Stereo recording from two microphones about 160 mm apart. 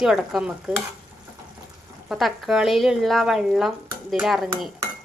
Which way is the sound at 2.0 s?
Centre (ahead or behind).